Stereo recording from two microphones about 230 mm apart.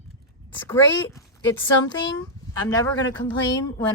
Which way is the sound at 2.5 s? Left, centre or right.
Centre.